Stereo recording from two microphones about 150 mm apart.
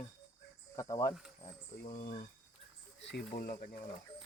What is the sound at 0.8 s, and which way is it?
Cricket, 20° left (ahead or behind).